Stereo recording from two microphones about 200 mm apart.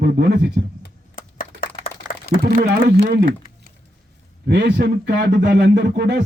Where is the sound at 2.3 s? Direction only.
50° right (ahead or behind).